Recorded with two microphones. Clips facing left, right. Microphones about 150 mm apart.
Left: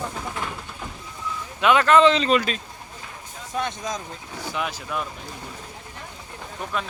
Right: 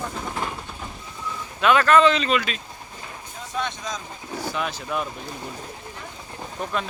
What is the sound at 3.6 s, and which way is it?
Speech, 45° left (ahead or behind).